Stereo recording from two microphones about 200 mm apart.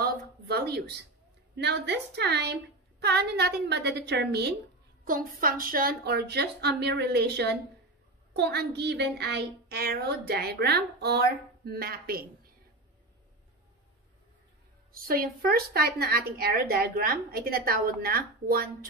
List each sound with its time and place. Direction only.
0.0 s a sound: 50° right (ahead or behind)
1.6 s a woman's voice: 60° right (ahead or behind)
5.0 s a woman's voice: 45° right (ahead or behind)
14.9 s a woman's voice: 45° right (ahead or behind)